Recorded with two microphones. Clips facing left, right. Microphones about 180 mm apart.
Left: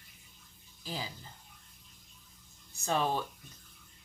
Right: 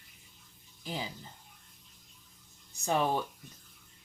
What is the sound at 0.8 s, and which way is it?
Speech, 20° right (ahead or behind).